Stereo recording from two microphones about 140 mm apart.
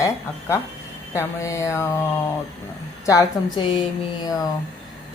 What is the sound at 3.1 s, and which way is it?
Speech, 25° left (ahead or behind).